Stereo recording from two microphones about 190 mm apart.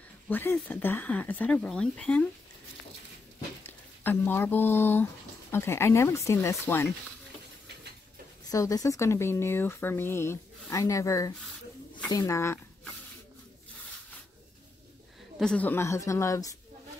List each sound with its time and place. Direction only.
0.3 s speech: 10° left (ahead or behind)
3.6 s speech: 10° left (ahead or behind)
8.5 s speech: 20° left (ahead or behind)
15.3 s speech: 5° left (ahead or behind)